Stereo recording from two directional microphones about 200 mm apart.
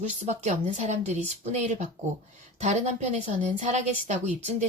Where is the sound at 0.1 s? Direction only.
35° right (ahead or behind).